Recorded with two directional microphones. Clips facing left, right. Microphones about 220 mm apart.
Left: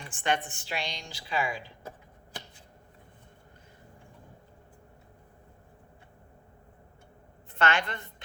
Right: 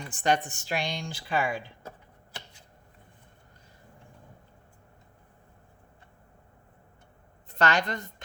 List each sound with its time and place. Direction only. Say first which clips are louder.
0.1 s a woman's voice: right 4 dB; 40° right (ahead or behind)
7.5 s a woman's voice: right 2 dB; 40° right (ahead or behind)